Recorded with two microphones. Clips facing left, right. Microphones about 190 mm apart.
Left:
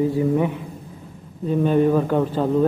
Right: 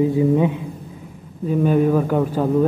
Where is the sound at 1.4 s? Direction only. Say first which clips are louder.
Right 1 dB; 5° right (ahead or behind).